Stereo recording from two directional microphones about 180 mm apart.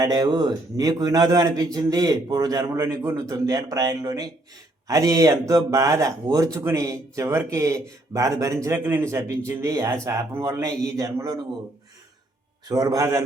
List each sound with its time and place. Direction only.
0.0 s a man's voice: 20° right (ahead or behind)
12.6 s speech: 20° right (ahead or behind)